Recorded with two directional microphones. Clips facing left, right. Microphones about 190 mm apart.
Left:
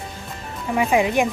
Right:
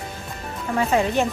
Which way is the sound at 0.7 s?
15° left (ahead or behind).